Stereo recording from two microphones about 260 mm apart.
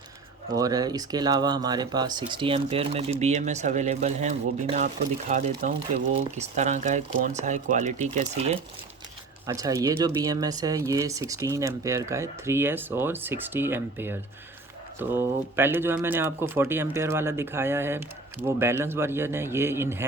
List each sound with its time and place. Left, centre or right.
0.5 s speech: centre
9.5 s speech: centre